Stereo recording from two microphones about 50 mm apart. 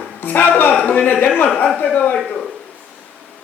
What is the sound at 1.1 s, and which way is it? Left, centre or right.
Speech, left.